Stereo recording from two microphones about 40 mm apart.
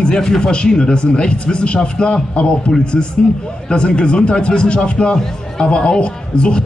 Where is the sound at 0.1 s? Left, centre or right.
Centre.